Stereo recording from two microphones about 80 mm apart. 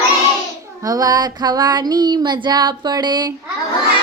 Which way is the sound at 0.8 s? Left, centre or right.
Right.